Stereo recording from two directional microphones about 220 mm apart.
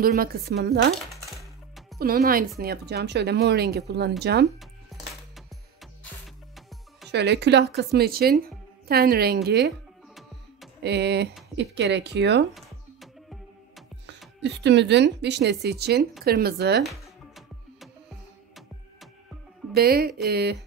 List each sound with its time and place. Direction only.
0.0 s speech: 45° right (ahead or behind)
0.9 s coin: centre (ahead or behind)
2.0 s speech: 45° right (ahead or behind)
7.1 s speech: 50° right (ahead or behind)
10.8 s speech: 50° right (ahead or behind)
12.5 s music: centre (ahead or behind)
14.4 s speech: 50° right (ahead or behind)
19.7 s speech: 45° right (ahead or behind)